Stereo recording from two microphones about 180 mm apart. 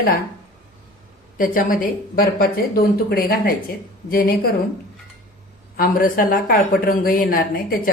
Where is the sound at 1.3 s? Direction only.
50° left (ahead or behind).